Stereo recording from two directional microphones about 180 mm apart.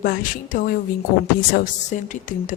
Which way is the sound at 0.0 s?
50° left (ahead or behind).